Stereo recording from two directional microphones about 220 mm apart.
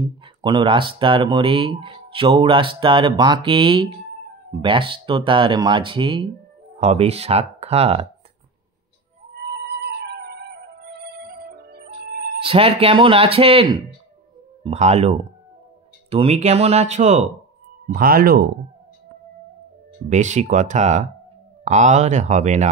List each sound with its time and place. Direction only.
0.4 s speech: 20° right (ahead or behind)
9.5 s music: 45° right (ahead or behind)
12.4 s speech: 25° right (ahead or behind)
17.8 s speech: 40° right (ahead or behind)
20.1 s speech: 30° right (ahead or behind)